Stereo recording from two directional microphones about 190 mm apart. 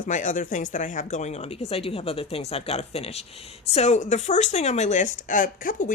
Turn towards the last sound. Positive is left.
turn(degrees=45)  # may be behind; listen again after turning